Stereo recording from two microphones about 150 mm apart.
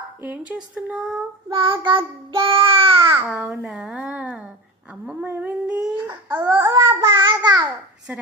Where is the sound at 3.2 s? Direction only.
10° right (ahead or behind).